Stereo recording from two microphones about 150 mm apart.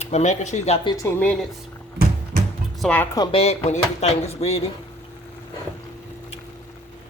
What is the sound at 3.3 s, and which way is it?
Speech, 45° left (ahead or behind).